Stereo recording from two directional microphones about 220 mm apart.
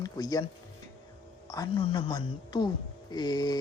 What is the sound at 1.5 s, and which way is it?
A woman's voice, 15° left (ahead or behind).